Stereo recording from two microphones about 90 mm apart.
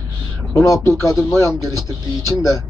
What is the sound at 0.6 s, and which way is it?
Speech, 35° left (ahead or behind).